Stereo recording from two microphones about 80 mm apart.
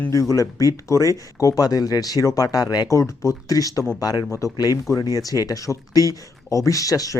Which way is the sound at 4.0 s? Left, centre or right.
Left.